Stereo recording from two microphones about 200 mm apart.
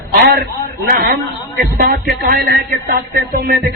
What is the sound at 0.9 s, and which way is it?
A man's voice, 55° right (ahead or behind).